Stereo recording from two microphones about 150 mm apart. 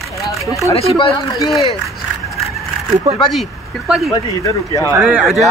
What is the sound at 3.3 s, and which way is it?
Speech, centre (ahead or behind).